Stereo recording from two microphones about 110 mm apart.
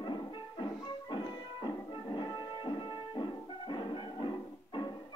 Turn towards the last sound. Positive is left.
turn(degrees=40)  # may be behind; listen again after turning